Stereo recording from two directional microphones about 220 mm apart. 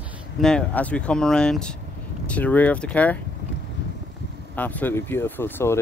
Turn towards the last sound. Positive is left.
turn(degrees=10)  # may be behind; listen again after turning